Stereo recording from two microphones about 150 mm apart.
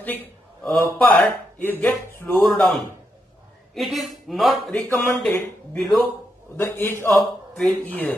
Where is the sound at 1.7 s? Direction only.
10° left (ahead or behind).